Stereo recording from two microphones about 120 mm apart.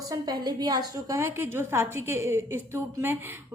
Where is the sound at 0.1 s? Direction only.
35° right (ahead or behind).